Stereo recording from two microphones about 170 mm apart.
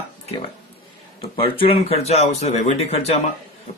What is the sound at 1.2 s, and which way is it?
Speech, 30° left (ahead or behind).